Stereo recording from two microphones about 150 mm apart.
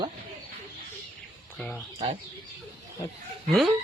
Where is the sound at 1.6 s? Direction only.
5° left (ahead or behind).